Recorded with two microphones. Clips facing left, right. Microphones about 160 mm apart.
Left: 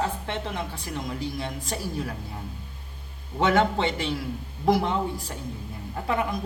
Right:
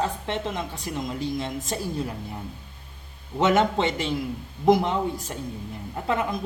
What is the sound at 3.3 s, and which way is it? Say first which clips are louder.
A woman's voice: right 1 dB; 20° right (ahead or behind).